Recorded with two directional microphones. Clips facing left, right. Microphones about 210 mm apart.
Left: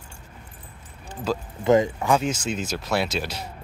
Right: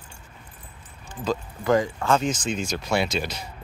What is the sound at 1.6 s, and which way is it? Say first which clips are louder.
Speech: left 4 dB; 20° left (ahead or behind).